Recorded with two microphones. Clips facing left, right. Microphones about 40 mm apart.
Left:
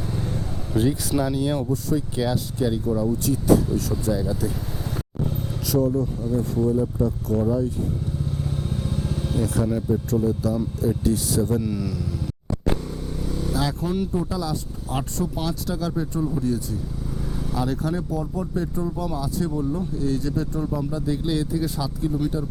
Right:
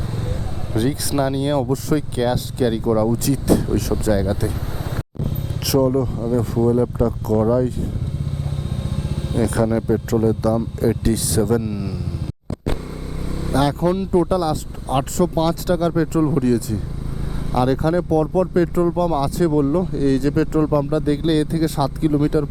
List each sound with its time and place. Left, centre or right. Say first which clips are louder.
0.9 s speech: right 4 dB; right
1.7 s speech: right 4 dB; right
2.1 s speech: right 4 dB; right
4.0 s speech: right 5 dB; right
5.6 s speech: right 5 dB; right
5.9 s speech: right 4 dB; right
8.4 s vehicle: even; centre
9.4 s speech: right 7 dB; right
11.6 s speech: right 1 dB; right
13.2 s vehicle: even; centre
13.5 s speech: right 8 dB; right
17.5 s speech: right 8 dB; right
18.2 s speech: right 10 dB; right